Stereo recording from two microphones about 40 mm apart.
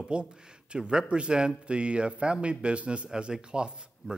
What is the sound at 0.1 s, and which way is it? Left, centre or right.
Speech, right.